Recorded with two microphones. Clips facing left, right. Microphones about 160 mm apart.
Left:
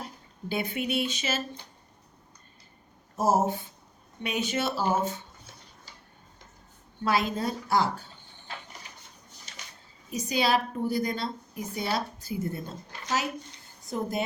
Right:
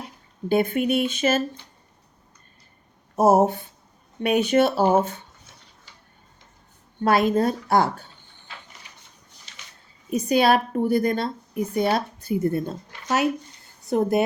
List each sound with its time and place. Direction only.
0.4 s speech: 50° right (ahead or behind)
3.2 s a woman's voice: 60° right (ahead or behind)
7.0 s a woman's voice: 55° right (ahead or behind)
10.1 s a woman's voice: 55° right (ahead or behind)
13.8 s a woman's voice: 65° right (ahead or behind)